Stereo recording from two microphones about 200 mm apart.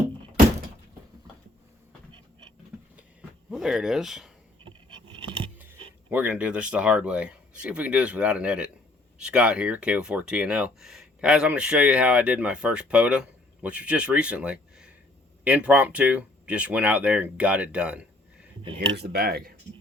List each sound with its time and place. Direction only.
2.9 s a sound: 5° right (ahead or behind)
5.5 s speech: 10° right (ahead or behind)
18.9 s speech: 55° right (ahead or behind)